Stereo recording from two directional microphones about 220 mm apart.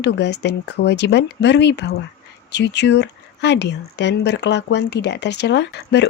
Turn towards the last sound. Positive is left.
turn(degrees=50)  # may be behind; listen again after turning